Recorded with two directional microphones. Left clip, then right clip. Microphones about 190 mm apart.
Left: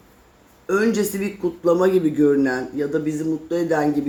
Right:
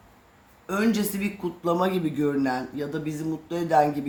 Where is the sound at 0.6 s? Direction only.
30° right (ahead or behind).